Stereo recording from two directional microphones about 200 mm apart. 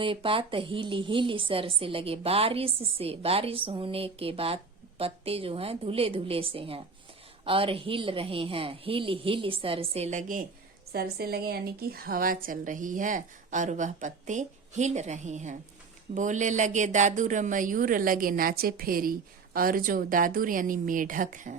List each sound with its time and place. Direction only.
0.0 s a woman's voice: 25° right (ahead or behind); by 21.5 s 40° right (ahead or behind)